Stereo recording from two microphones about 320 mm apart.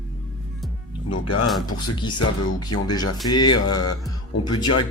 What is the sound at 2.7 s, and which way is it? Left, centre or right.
Mantra, left.